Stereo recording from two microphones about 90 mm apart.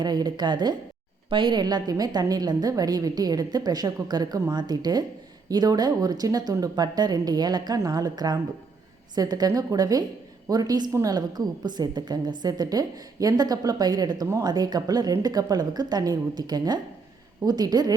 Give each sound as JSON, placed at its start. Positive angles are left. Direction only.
{"t": 0.0, "sound": "a woman's voice", "side_deg": -50}